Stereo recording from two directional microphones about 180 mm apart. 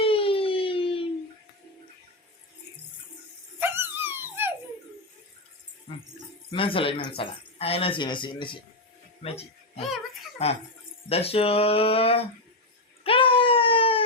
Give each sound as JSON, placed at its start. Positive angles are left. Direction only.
{"t": 0.0, "sound": "a sound", "side_deg": 30}
{"t": 3.6, "sound": "dog", "side_deg": -10}
{"t": 5.9, "sound": "jingle bell", "side_deg": 30}
{"t": 6.5, "sound": "speech", "side_deg": 30}
{"t": 13.1, "sound": "wail", "side_deg": 30}